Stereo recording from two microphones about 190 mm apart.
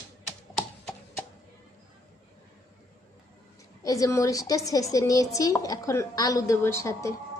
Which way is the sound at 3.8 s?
15° left (ahead or behind).